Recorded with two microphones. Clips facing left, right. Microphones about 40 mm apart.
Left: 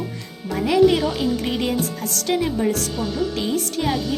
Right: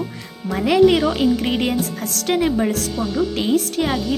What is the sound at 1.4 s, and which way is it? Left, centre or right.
A woman's voice, right.